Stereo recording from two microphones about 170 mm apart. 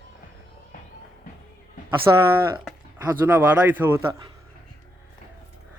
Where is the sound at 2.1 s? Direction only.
15° right (ahead or behind).